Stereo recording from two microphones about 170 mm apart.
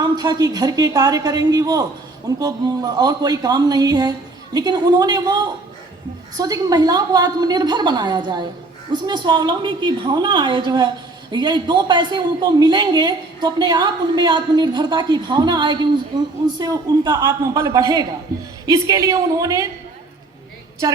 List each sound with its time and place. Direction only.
0.0 s a man's voice: 25° right (ahead or behind)